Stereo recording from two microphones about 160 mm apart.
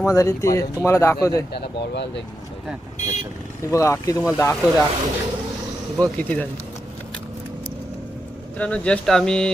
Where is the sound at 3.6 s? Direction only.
20° left (ahead or behind).